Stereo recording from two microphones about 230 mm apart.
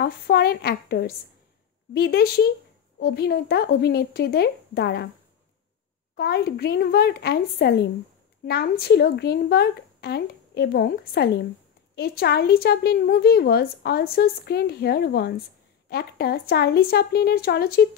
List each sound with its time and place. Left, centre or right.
0.0 s a woman's voice: left
6.1 s a woman's voice: left